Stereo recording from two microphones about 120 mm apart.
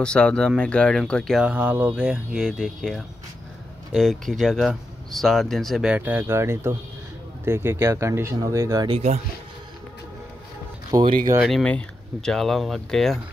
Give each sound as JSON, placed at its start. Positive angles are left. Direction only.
{"t": 0.0, "sound": "speech", "side_deg": 10}
{"t": 1.4, "sound": "speech", "side_deg": -15}
{"t": 8.9, "sound": "speech", "side_deg": -70}
{"t": 11.1, "sound": "speech", "side_deg": -40}
{"t": 11.4, "sound": "speech", "side_deg": 5}